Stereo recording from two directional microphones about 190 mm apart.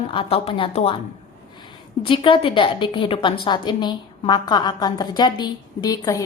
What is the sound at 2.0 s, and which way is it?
A woman's voice, 25° left (ahead or behind).